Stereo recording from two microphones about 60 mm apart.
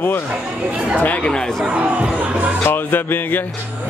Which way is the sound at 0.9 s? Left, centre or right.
Left.